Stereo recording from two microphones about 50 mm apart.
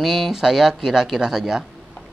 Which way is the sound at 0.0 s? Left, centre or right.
Centre.